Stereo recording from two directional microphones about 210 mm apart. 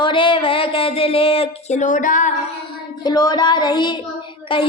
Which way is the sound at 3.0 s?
20° left (ahead or behind).